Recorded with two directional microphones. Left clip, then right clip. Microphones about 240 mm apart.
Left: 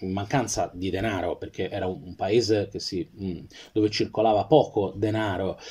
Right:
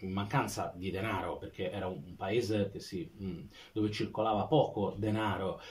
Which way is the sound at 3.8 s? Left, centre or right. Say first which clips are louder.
Left 10 dB; left.